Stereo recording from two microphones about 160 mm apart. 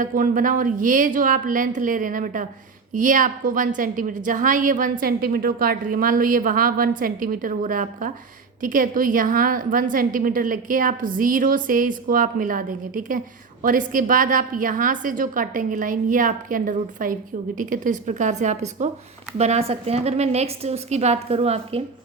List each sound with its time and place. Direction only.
0.0 s a woman's voice: 55° right (ahead or behind); by 21.8 s 40° right (ahead or behind)